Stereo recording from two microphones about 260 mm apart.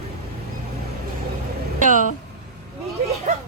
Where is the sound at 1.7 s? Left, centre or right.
Right.